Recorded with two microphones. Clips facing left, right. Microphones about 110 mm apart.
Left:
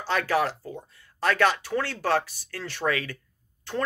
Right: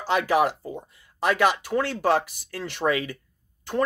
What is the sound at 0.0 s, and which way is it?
Speech, 15° right (ahead or behind).